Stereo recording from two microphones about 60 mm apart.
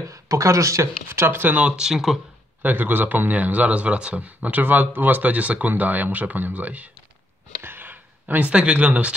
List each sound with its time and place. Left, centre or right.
0.1 s speech: right
1.0 s speech: right
1.5 s speech: centre
2.6 s a man's voice: right
7.6 s a sound: right